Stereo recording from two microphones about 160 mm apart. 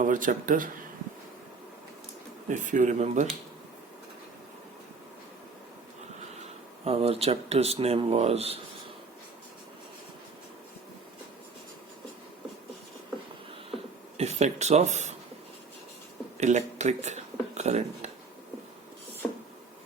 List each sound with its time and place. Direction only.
0.0 s speech: 55° right (ahead or behind)
2.5 s speech: 50° right (ahead or behind)
6.8 s speech: 40° right (ahead or behind)
14.2 s speech: 45° right (ahead or behind)
16.4 s speech: 45° right (ahead or behind)